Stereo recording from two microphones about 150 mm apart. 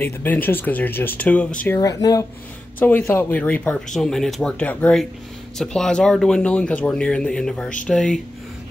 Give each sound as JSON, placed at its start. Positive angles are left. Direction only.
{"t": 0.0, "sound": "speech", "side_deg": 15}
{"t": 1.8, "sound": "speech", "side_deg": 25}
{"t": 2.8, "sound": "speech", "side_deg": 10}